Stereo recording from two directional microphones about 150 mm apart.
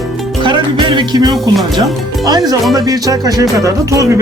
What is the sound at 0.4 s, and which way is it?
Speech, 30° right (ahead or behind).